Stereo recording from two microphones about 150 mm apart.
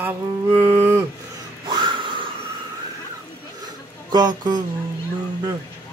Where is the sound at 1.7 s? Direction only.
30° right (ahead or behind).